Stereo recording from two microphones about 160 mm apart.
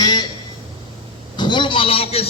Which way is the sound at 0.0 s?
25° left (ahead or behind).